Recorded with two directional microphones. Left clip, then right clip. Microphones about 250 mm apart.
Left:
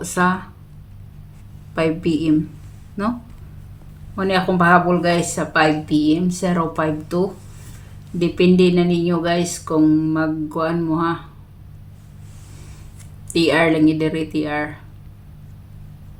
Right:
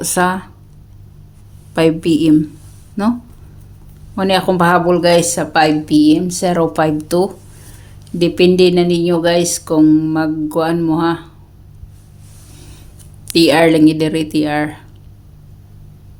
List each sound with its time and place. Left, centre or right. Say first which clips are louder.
0.0 s speech: right 4 dB; right
1.7 s speech: right 6 dB; right
13.3 s speech: right 6 dB; right